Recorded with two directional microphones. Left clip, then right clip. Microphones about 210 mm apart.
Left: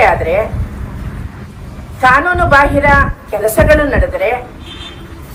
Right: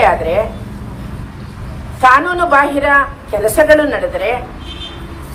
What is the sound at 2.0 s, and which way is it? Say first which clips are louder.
Speech: even; 35° left (ahead or behind).